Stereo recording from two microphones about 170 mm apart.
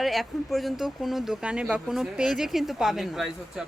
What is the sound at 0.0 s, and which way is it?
Speech, centre (ahead or behind).